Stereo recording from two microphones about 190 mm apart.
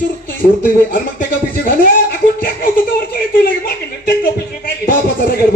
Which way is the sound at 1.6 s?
50° left (ahead or behind).